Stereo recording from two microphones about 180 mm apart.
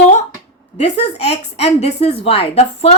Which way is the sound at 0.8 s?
35° left (ahead or behind).